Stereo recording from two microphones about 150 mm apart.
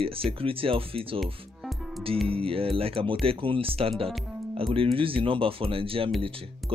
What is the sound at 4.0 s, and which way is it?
Music, 40° right (ahead or behind).